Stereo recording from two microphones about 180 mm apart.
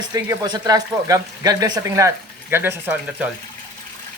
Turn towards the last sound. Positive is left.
turn(degrees=-10)  # may be behind; listen again after turning